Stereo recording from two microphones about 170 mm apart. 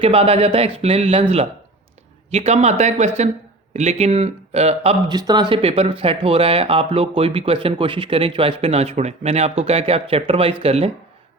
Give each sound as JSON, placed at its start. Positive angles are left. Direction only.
{"t": 0.0, "sound": "speech", "side_deg": -35}
{"t": 5.0, "sound": "speech", "side_deg": -25}